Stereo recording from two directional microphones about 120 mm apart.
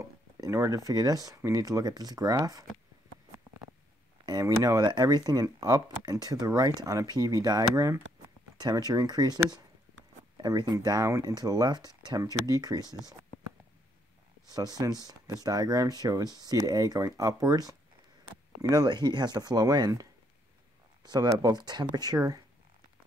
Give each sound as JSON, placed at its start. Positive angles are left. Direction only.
{"t": 0.0, "sound": "speech", "side_deg": -25}
{"t": 4.3, "sound": "speech", "side_deg": -30}
{"t": 14.5, "sound": "speech", "side_deg": -35}